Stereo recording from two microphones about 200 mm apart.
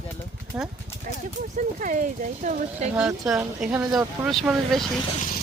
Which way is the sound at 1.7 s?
40° right (ahead or behind).